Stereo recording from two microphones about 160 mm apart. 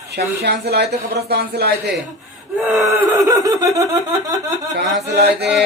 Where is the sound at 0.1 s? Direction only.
90° right.